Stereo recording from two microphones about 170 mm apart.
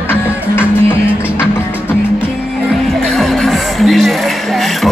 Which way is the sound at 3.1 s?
Centre (ahead or behind).